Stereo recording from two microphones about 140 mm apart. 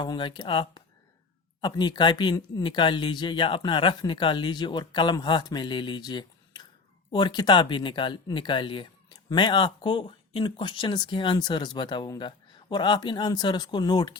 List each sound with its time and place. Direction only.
0.0 s speech: 35° left (ahead or behind)